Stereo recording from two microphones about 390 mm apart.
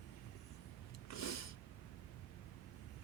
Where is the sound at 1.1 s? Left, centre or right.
Left.